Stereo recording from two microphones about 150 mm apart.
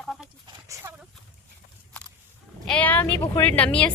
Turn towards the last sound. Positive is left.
turn(degrees=10)  # may be behind; listen again after turning